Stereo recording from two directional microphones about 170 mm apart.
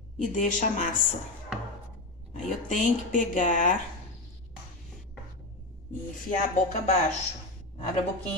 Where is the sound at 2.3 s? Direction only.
45° left (ahead or behind).